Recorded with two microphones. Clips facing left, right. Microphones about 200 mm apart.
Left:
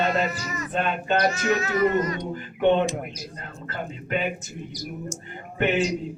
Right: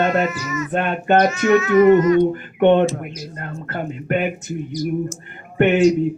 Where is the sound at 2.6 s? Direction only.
60° right (ahead or behind).